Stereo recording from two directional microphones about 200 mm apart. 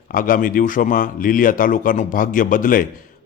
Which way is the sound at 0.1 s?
45° left (ahead or behind).